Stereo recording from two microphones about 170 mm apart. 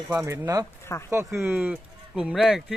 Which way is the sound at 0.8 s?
15° left (ahead or behind).